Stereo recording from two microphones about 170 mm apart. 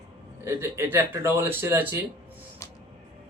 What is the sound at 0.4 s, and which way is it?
Speech, 15° right (ahead or behind).